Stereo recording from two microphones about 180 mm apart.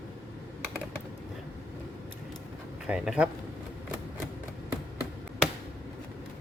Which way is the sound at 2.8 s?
5° right (ahead or behind).